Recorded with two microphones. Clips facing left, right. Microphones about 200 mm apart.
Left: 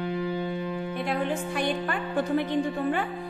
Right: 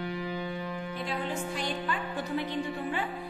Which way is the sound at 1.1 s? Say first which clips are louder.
Left 5 dB; 55° left (ahead or behind).